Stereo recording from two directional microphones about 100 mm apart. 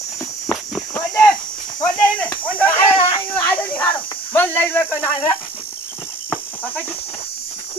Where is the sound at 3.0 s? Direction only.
65° left (ahead or behind).